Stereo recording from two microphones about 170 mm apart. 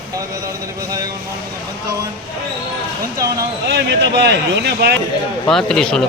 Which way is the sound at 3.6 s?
80° right.